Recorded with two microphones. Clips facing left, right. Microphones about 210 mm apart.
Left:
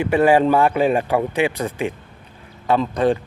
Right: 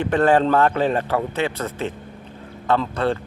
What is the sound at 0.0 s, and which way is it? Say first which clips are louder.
A man's voice: left 2 dB; 10° left (ahead or behind).